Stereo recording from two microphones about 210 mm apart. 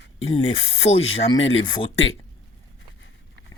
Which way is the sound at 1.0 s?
65° left (ahead or behind).